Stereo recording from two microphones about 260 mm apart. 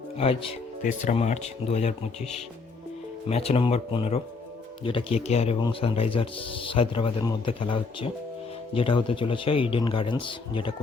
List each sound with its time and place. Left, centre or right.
0.2 s speech: left
3.2 s speech: left